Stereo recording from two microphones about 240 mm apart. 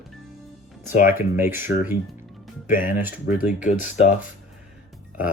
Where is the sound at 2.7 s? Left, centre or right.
Left.